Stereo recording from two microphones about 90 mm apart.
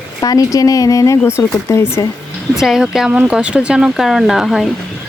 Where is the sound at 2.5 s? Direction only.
5° right (ahead or behind).